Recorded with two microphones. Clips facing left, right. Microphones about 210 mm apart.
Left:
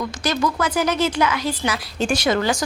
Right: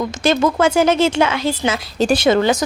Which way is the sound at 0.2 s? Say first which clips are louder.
Right 7 dB; 25° right (ahead or behind).